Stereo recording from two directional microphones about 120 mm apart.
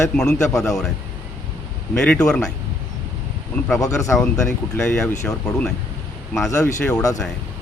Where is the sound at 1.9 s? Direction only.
5° left (ahead or behind).